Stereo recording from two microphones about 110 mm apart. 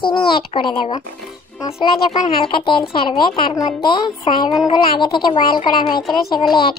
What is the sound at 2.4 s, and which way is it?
A child's voice, 50° left (ahead or behind).